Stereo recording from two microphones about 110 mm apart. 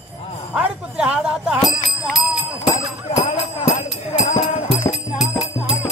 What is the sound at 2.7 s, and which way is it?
Music, 55° left (ahead or behind).